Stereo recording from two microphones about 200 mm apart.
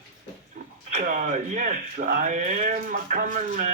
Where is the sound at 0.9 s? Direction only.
45° right (ahead or behind).